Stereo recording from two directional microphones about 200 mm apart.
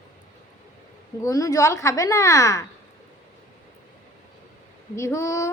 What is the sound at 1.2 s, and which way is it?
A woman's voice, 15° left (ahead or behind).